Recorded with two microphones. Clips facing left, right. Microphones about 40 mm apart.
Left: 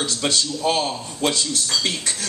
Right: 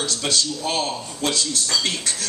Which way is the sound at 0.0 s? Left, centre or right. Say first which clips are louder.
Left 1 dB; centre.